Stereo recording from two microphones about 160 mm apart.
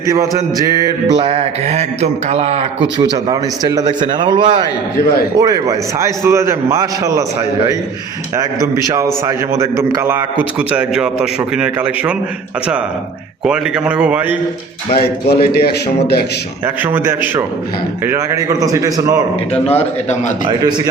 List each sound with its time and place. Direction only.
0.1 s a man's voice: 20° right (ahead or behind); by 2.6 s 40° right (ahead or behind)
3.0 s a man's voice: 25° right (ahead or behind)
8.4 s a man's voice: 20° right (ahead or behind)
13.4 s a man's voice: 5° right (ahead or behind)
15.3 s a man's voice: 80° left
16.6 s a man's voice: 15° right (ahead or behind)
19.6 s a man's voice: 45° left (ahead or behind)
20.6 s a man's voice: 25° right (ahead or behind)